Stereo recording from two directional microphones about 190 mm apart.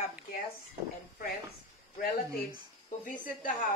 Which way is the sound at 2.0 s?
50° left (ahead or behind).